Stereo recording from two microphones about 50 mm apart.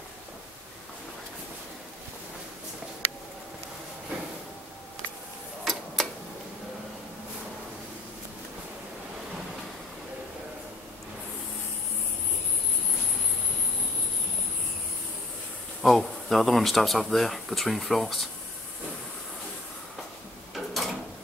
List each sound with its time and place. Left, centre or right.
5.6 s tick-tock: centre
15.8 s speech: centre
20.5 s a sound: centre